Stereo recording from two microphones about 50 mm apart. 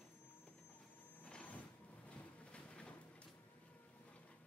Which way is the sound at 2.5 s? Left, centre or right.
Left.